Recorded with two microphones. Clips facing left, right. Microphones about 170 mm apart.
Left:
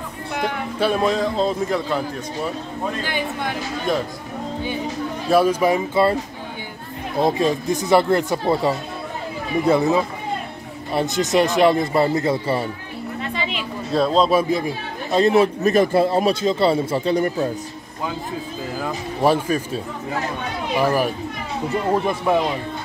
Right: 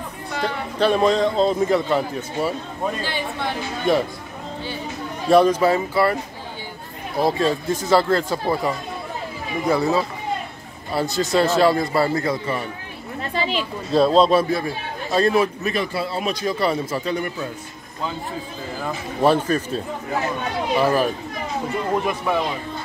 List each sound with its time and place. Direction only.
0.3 s a man's voice: 10° left (ahead or behind)
3.0 s speech: 15° left (ahead or behind)
5.3 s speech: 10° left (ahead or behind)
7.2 s speech: 20° left (ahead or behind)
13.3 s a sound: 35° right (ahead or behind)
13.9 s a man's voice: centre (ahead or behind)
14.3 s speech: 20° left (ahead or behind)
15.6 s speech: 45° left (ahead or behind)
16.3 s speech: 25° left (ahead or behind)
18.8 s speech: 10° left (ahead or behind)